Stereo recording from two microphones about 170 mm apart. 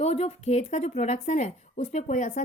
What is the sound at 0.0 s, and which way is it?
Speech, 40° left (ahead or behind).